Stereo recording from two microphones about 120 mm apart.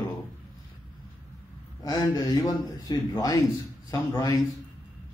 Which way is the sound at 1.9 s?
30° left (ahead or behind).